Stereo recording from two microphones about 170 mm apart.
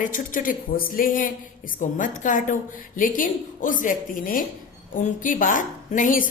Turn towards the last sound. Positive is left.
turn(degrees=55)  # may be behind; listen again after turning